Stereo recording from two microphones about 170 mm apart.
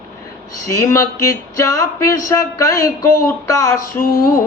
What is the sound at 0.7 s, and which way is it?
Mantra, 15° left (ahead or behind).